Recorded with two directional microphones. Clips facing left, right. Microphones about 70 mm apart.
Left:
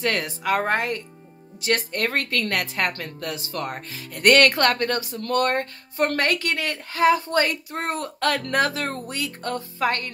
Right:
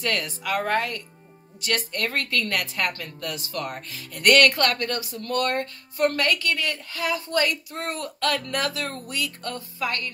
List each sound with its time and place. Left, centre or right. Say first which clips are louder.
0.0 s speech: left 3 dB; left